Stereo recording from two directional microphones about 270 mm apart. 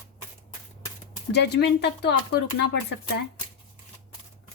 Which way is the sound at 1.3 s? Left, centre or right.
Left.